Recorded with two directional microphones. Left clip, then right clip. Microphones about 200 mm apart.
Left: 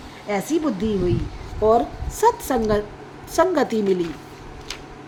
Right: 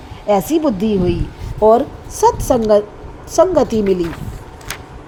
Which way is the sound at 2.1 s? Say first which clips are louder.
Right 6 dB; 10° right (ahead or behind).